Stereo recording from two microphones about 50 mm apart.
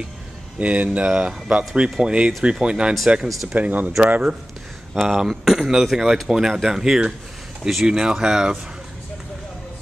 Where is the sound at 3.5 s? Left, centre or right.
Right.